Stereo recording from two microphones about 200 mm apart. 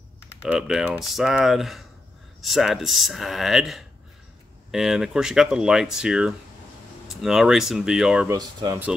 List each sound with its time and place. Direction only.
0.4 s speech: 5° right (ahead or behind)
8.3 s speech: 20° right (ahead or behind)